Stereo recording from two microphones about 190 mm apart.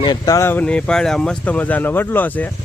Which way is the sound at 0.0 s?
20° left (ahead or behind).